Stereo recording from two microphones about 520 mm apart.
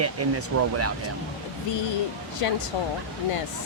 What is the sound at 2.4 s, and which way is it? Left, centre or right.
Speech, left.